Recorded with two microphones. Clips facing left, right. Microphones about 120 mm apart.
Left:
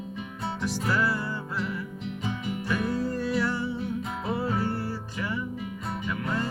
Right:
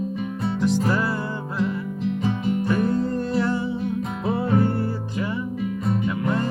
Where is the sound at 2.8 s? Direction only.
55° right (ahead or behind).